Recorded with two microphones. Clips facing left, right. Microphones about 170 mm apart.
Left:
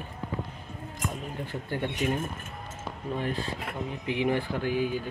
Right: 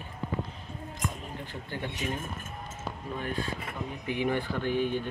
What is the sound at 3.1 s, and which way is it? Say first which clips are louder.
Speech: left 2 dB; 30° left (ahead or behind).